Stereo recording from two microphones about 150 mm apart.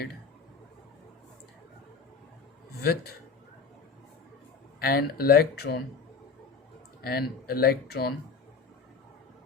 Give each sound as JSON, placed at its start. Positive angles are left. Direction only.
{"t": 2.7, "sound": "a man's voice", "side_deg": 90}
{"t": 4.8, "sound": "speech", "side_deg": 90}
{"t": 7.0, "sound": "speech", "side_deg": 90}